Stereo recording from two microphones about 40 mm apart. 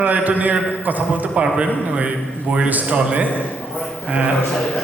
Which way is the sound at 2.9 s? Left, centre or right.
Right.